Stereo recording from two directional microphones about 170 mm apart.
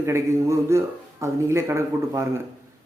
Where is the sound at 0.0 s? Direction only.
15° right (ahead or behind).